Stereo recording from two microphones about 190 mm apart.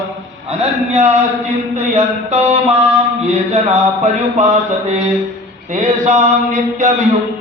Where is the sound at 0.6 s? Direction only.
35° right (ahead or behind).